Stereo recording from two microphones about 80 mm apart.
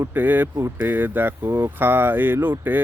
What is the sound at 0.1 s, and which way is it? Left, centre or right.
Speech, right.